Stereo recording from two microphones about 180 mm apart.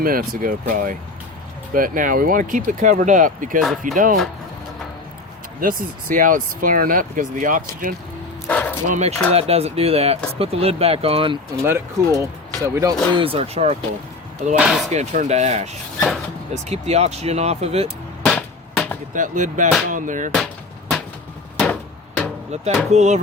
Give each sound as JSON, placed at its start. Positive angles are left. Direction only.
{"t": 0.0, "sound": "speech", "side_deg": -50}
{"t": 3.6, "sound": "speech", "side_deg": 0}
{"t": 3.9, "sound": "speech", "side_deg": -45}
{"t": 5.5, "sound": "speech", "side_deg": -50}
{"t": 8.4, "sound": "bow-wow", "side_deg": 10}
{"t": 8.9, "sound": "speech", "side_deg": -40}
{"t": 11.6, "sound": "speech", "side_deg": -15}
{"t": 13.2, "sound": "speech", "side_deg": -30}
{"t": 14.6, "sound": "speech", "side_deg": 0}
{"t": 14.8, "sound": "speech", "side_deg": -40}
{"t": 17.8, "sound": "a sound", "side_deg": 5}
{"t": 19.1, "sound": "speech", "side_deg": -45}
{"t": 21.7, "sound": "hammer", "side_deg": 10}
{"t": 22.5, "sound": "speech", "side_deg": -35}